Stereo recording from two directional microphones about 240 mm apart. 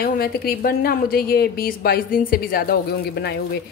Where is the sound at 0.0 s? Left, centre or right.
Left.